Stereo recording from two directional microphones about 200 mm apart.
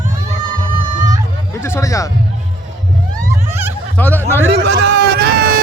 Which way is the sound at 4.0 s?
10° left (ahead or behind).